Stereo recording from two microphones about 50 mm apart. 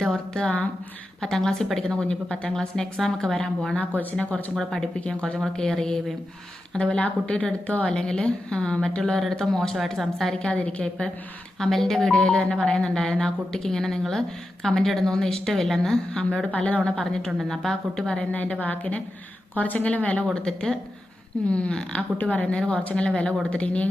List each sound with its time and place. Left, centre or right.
1.2 s a woman's voice: centre
3.8 s speech: left
4.5 s speech: centre
4.9 s a woman's voice: left; by 10.3 s centre
10.3 s a woman's voice: centre
11.6 s a woman's voice: centre
12.1 s a woman's voice: left
16.5 s a woman's voice: left
16.8 s a woman's voice: centre
18.2 s a woman's voice: left
20.3 s a woman's voice: centre